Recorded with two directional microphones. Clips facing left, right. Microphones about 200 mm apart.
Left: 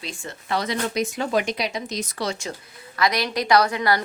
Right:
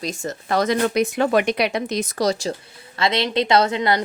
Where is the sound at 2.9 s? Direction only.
25° right (ahead or behind).